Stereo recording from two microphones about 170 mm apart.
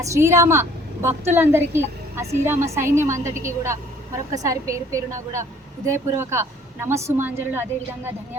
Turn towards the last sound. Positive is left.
turn(degrees=-10)  # may be behind; listen again after turning